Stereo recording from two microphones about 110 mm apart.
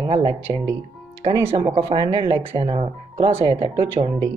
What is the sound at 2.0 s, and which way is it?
Speech, 45° right (ahead or behind).